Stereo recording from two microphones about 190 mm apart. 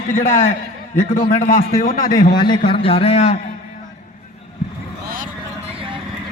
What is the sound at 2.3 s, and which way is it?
A man's voice, 25° left (ahead or behind).